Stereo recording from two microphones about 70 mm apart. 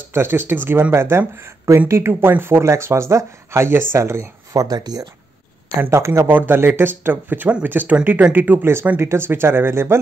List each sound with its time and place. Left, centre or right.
0.1 s speech: right
2.6 s speech: right
4.6 s speech: right
5.9 s speech: right
6.2 s speech: right